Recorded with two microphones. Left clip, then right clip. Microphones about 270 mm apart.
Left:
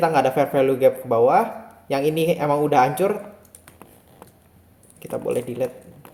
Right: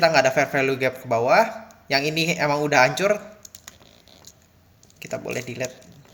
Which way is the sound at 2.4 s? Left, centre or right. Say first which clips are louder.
Left 1 dB; centre.